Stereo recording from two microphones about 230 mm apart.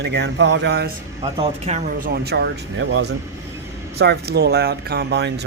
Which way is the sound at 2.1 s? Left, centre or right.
Right.